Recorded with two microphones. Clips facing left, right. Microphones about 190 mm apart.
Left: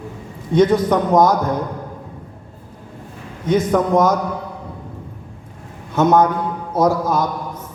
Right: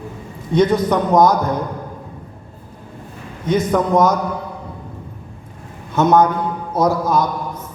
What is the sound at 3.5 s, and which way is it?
Speech, 50° left (ahead or behind).